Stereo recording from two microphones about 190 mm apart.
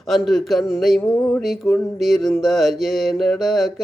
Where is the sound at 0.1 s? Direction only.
Centre (ahead or behind).